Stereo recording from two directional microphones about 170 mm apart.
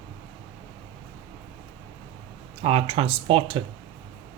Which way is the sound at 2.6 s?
35° right (ahead or behind).